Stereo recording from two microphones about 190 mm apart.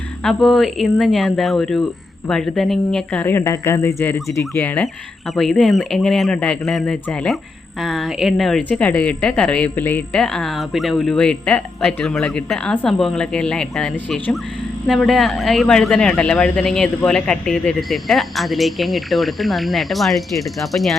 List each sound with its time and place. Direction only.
0.2 s speech: centre (ahead or behind)